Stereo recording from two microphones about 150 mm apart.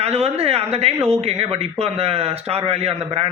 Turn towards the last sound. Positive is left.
turn(degrees=-45)  # may be behind; listen again after turning